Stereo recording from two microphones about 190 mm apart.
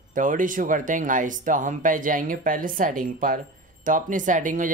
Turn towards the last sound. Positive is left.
turn(degrees=-45)  # may be behind; listen again after turning